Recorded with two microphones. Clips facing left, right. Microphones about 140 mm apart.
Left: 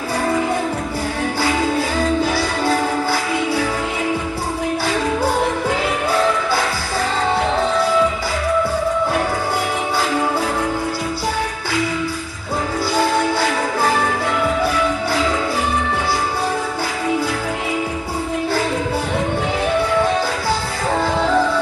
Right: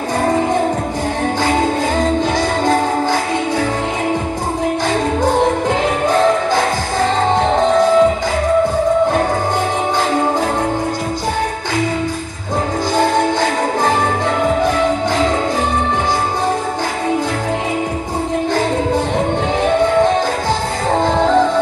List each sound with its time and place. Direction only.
0.2 s music: 40° right (ahead or behind)
6.0 s music: 45° right (ahead or behind)
7.7 s music: 45° right (ahead or behind)
13.0 s music: 45° right (ahead or behind)